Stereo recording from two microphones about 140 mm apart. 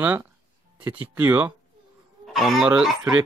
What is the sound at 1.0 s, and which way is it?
Speech, 10° right (ahead or behind).